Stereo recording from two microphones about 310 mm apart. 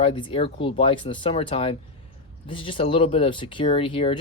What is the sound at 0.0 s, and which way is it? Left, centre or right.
Speech, centre.